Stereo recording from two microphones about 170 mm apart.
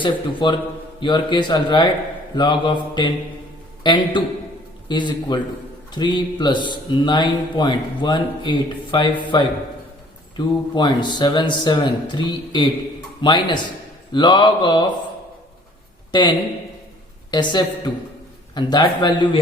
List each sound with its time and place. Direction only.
0.0 s speech: 30° left (ahead or behind)
16.1 s speech: 25° left (ahead or behind)
17.3 s speech: 25° left (ahead or behind)